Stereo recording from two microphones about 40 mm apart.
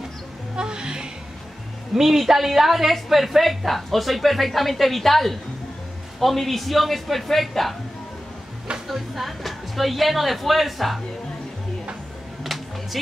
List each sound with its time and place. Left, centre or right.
0.6 s music: right
2.0 s a woman's voice: centre
8.8 s a woman's voice: centre
12.9 s a woman's voice: centre